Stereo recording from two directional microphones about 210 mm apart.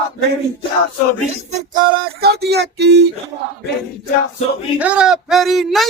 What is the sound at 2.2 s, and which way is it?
Speech, 50° right (ahead or behind).